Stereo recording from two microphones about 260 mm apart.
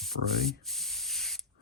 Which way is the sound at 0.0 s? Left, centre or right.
Centre.